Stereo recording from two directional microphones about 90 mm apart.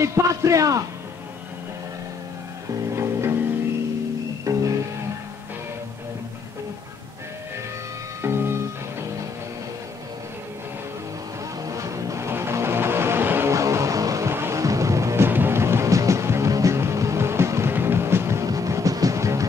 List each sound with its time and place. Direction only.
0.0 s a man's voice: 35° right (ahead or behind)
3.0 s music: 30° right (ahead or behind)
4.5 s music: 35° right (ahead or behind)
8.2 s music: 30° right (ahead or behind)
11.6 s music: 35° right (ahead or behind)
13.5 s music: 35° right (ahead or behind)